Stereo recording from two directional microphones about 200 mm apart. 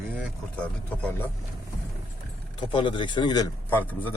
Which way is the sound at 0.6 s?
5° left (ahead or behind).